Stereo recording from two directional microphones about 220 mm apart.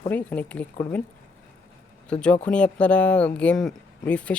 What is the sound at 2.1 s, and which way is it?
Speech, 5° left (ahead or behind).